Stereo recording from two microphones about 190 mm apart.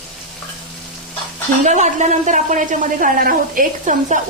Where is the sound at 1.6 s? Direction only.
40° right (ahead or behind).